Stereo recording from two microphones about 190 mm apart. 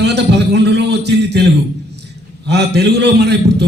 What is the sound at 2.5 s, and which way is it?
A man's voice, 60° right (ahead or behind).